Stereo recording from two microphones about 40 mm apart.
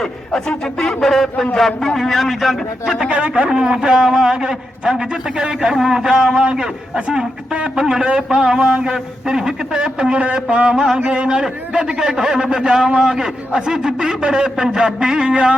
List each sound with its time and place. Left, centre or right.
0.3 s speech: centre
1.0 s a man's voice: centre
3.1 s a man's voice: right
3.5 s a man's voice: centre